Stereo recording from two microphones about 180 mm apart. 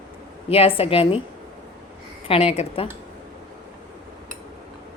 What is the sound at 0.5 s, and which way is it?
Speech, 30° left (ahead or behind).